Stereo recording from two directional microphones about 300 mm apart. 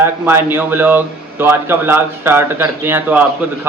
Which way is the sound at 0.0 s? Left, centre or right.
Centre.